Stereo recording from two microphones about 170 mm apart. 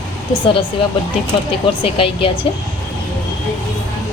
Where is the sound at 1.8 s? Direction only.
30° left (ahead or behind).